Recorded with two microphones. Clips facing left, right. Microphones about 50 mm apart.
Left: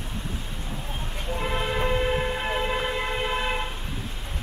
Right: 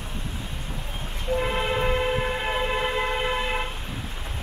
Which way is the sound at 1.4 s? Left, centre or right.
Centre.